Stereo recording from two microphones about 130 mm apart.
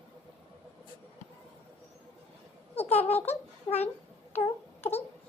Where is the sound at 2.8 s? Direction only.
55° left (ahead or behind).